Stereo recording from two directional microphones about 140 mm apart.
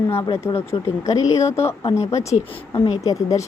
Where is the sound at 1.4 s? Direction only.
20° left (ahead or behind).